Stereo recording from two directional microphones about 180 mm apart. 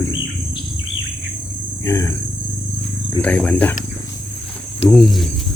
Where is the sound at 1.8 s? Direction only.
15° left (ahead or behind).